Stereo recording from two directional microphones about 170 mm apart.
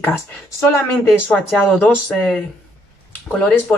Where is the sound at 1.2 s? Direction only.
5° left (ahead or behind).